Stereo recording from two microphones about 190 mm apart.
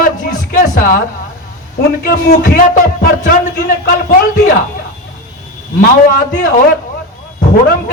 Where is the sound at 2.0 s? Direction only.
55° left (ahead or behind).